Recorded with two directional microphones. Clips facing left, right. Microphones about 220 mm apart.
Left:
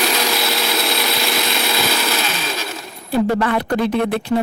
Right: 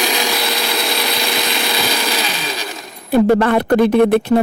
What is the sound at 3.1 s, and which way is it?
Speech, 55° right (ahead or behind).